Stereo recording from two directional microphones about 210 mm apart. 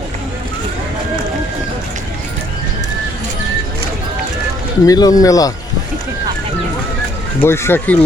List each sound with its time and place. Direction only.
4.9 s speech: 15° left (ahead or behind)
7.4 s speech: 10° left (ahead or behind)